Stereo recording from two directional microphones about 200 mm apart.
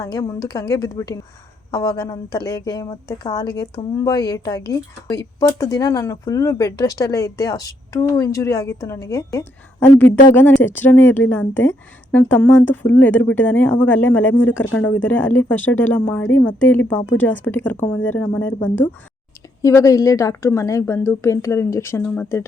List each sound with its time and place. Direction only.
0.0 s speech: 15° left (ahead or behind)